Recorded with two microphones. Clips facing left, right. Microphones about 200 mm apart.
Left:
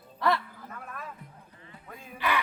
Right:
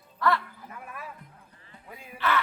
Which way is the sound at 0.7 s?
10° right (ahead or behind).